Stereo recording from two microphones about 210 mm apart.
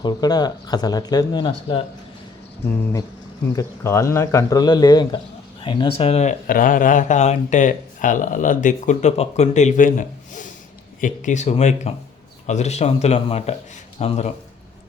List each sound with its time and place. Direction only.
0.0 s speech: 20° left (ahead or behind)
3.5 s speech: 15° left (ahead or behind); by 6.3 s 30° left (ahead or behind)
6.5 s speech: 40° left (ahead or behind)